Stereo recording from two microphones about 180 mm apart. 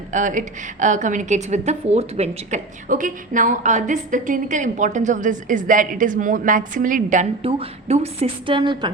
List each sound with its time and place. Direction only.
0.1 s a woman's voice: 45° right (ahead or behind)
7.4 s a woman's voice: 35° right (ahead or behind)